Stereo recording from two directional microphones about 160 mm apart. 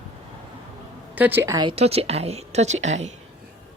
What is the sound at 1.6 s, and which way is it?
A woman's voice, 40° right (ahead or behind).